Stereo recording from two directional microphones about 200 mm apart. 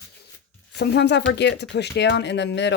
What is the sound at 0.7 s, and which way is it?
Speech, 55° left (ahead or behind).